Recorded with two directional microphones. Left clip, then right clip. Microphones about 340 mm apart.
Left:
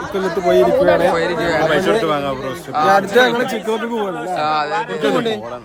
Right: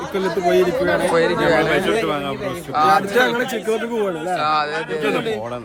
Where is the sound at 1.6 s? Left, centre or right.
Left.